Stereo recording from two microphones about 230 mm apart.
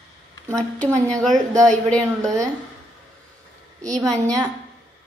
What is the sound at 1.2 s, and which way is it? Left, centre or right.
Speech, centre.